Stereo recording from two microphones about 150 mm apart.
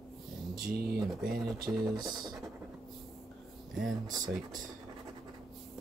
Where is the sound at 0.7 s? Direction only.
90° right.